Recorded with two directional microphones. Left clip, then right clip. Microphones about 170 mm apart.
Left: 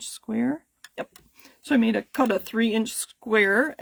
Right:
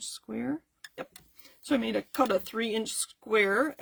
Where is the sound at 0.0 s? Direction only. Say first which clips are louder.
Left 8 dB; 50° left (ahead or behind).